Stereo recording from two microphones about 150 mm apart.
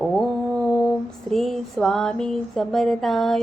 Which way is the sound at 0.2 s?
5° left (ahead or behind).